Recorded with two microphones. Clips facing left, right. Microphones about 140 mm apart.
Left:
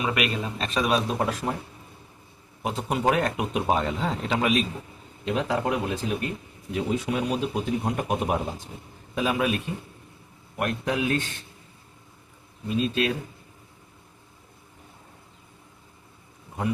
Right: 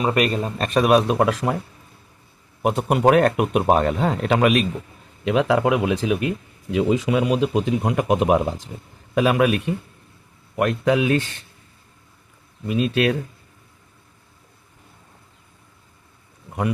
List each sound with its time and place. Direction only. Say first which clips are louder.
0.0 s speech: right 6 dB; 40° right (ahead or behind); by 1.5 s 90° right
2.6 s speech: right 7 dB; 65° right (ahead or behind)
5.2 s speech: right 7 dB; 90° right
9.1 s a man's voice: right 7 dB; 70° right (ahead or behind)
10.6 s speech: right 7 dB; 90° right
12.6 s a man's voice: right 5 dB; 75° right (ahead or behind)